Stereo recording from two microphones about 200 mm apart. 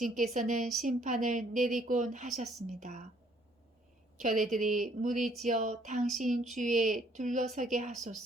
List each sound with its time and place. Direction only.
0.0 s a woman's voice: 40° right (ahead or behind)
4.2 s a woman's voice: 40° right (ahead or behind)